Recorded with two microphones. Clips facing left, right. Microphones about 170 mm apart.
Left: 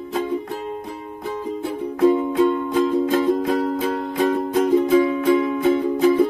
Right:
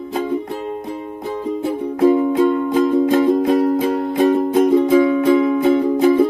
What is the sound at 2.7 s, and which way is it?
Music, 10° right (ahead or behind).